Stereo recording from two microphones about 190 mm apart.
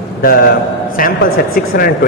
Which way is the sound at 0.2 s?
50° left (ahead or behind).